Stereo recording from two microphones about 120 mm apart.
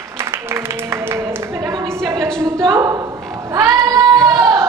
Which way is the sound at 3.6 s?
30° right (ahead or behind).